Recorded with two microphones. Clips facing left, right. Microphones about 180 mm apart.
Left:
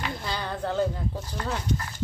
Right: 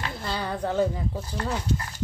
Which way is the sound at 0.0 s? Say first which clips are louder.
Right 1 dB; centre (ahead or behind).